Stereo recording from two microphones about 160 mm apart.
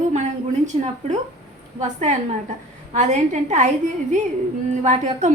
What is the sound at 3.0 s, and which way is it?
Speech, 45° right (ahead or behind).